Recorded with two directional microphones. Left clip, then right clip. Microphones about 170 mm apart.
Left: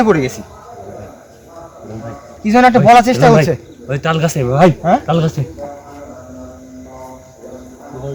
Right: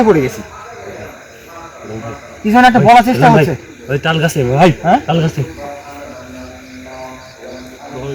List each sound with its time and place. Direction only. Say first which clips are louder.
0.0 s speech: right 2 dB; 5° right (ahead or behind)
2.5 s a man's voice: right 1 dB; 20° left (ahead or behind)
3.8 s a man's voice: right 2 dB; 10° left (ahead or behind)